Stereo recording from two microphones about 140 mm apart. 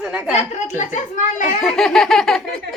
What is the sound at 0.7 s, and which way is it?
Speech, 60° left (ahead or behind).